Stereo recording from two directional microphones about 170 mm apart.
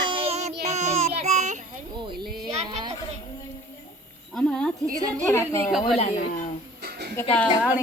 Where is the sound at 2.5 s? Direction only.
40° right (ahead or behind).